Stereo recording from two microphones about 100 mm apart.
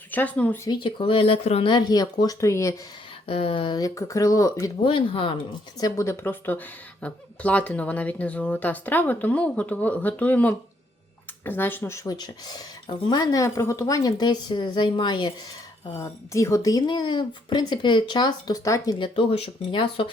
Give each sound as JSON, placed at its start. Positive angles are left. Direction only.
{"t": 0.1, "sound": "a woman's voice", "side_deg": 15}
{"t": 0.7, "sound": "speech", "side_deg": 55}
{"t": 1.6, "sound": "speech", "side_deg": 45}
{"t": 3.2, "sound": "speech", "side_deg": 70}
{"t": 3.8, "sound": "speech", "side_deg": 35}
{"t": 4.8, "sound": "speech", "side_deg": 60}
{"t": 5.8, "sound": "a woman's voice", "side_deg": 30}
{"t": 12.0, "sound": "speech", "side_deg": 40}
{"t": 16.0, "sound": "speech", "side_deg": 30}
{"t": 18.9, "sound": "speech", "side_deg": 60}